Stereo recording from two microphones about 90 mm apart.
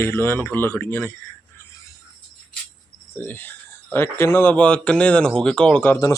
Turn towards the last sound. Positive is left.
turn(degrees=10)  # may be behind; listen again after turning